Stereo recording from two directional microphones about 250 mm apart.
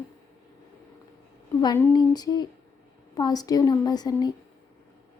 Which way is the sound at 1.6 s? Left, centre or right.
Centre.